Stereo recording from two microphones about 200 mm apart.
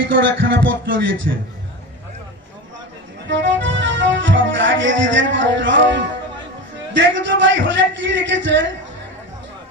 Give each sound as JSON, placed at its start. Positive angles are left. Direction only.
{"t": 0.1, "sound": "music", "side_deg": -70}
{"t": 3.2, "sound": "music", "side_deg": -65}
{"t": 8.3, "sound": "speech", "side_deg": -65}